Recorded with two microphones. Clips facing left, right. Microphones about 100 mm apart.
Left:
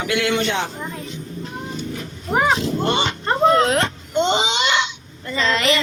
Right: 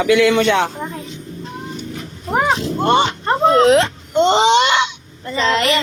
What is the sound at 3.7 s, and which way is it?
Speech, 85° right.